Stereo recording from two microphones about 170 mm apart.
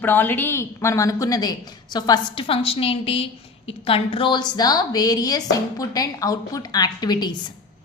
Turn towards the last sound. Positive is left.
turn(degrees=25)  # may be behind; listen again after turning